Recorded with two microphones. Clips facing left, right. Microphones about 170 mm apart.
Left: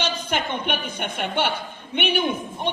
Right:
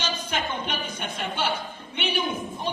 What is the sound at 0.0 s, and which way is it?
A woman's voice, 65° left (ahead or behind).